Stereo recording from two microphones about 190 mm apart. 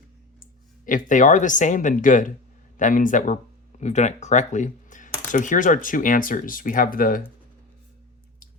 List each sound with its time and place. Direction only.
0.9 s speech: 45° left (ahead or behind)